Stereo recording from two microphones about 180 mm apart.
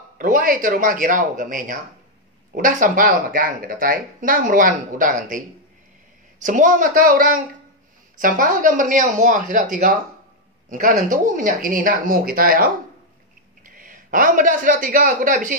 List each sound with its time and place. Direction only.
0.2 s speech: 50° right (ahead or behind)
6.4 s speech: 45° right (ahead or behind)